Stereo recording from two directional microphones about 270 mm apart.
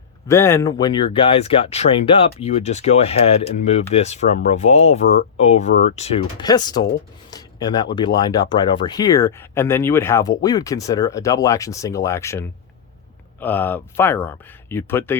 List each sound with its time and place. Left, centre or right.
0.3 s speech: centre